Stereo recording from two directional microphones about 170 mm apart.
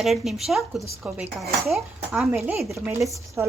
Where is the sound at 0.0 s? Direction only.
Centre (ahead or behind).